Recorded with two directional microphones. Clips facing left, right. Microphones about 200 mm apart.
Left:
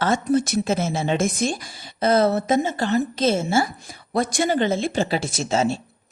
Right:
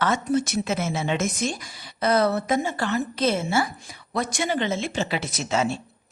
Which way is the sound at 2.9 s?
35° left (ahead or behind).